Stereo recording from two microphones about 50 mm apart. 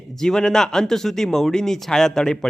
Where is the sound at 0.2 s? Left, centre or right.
Centre.